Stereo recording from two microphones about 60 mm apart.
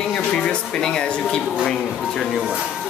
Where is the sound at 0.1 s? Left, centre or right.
Centre.